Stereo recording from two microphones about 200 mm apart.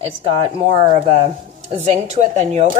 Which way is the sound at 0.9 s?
30° right (ahead or behind).